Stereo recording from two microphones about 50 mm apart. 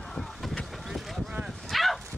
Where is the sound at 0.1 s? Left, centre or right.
Centre.